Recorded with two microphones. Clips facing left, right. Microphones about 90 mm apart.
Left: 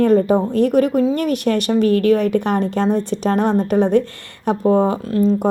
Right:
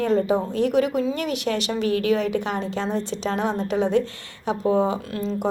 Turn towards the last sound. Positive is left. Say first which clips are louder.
# left 9 dB
turn(degrees=45)  # may be behind; listen again after turning